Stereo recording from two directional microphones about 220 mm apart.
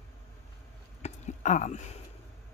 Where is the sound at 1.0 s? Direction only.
35° left (ahead or behind).